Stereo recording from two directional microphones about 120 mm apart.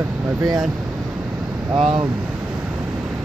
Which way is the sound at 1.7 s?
5° right (ahead or behind).